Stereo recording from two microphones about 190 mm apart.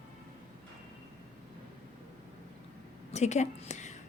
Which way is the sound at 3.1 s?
35° left (ahead or behind).